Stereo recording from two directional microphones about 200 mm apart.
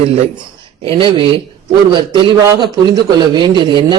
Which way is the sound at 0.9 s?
25° right (ahead or behind).